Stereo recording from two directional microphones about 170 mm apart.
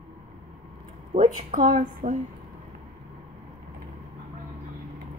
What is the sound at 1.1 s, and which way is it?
Speech, 50° right (ahead or behind).